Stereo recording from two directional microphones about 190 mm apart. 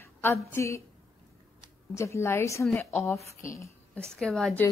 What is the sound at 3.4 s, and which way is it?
Speech, 15° left (ahead or behind).